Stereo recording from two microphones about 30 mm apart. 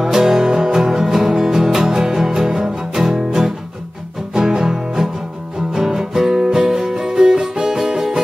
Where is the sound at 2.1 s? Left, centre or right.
Centre.